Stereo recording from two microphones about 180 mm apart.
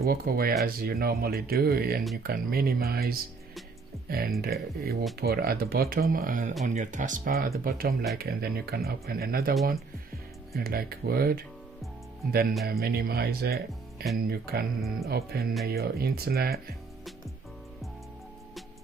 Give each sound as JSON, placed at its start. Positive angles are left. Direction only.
{"t": 0.0, "sound": "speech", "side_deg": -55}
{"t": 4.4, "sound": "speech", "side_deg": -60}